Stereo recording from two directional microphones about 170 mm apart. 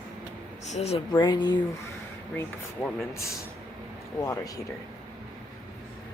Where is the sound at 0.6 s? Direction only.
40° left (ahead or behind).